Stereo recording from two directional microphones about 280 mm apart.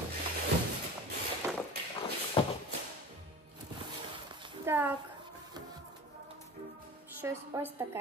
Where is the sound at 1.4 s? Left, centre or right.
Centre.